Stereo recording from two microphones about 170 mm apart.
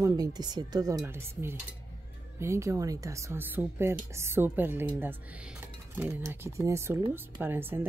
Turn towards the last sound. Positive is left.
turn(degrees=-10)  # may be behind; listen again after turning